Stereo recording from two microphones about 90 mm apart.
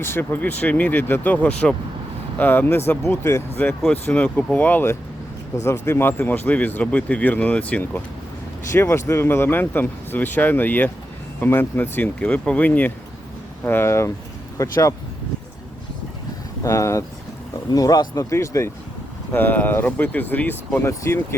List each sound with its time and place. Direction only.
0.0 s speech: 25° left (ahead or behind)
2.4 s speech: 20° left (ahead or behind)
8.7 s speech: 30° left (ahead or behind)
16.6 s speech: 35° left (ahead or behind)
17.7 s speech: 45° left (ahead or behind)
18.2 s speech: 35° left (ahead or behind)
19.3 s speech: 20° left (ahead or behind)